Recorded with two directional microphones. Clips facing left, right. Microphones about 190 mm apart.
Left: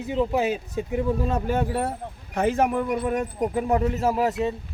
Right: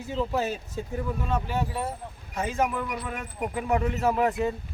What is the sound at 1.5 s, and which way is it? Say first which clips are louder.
Speech: left 5 dB; 55° left (ahead or behind).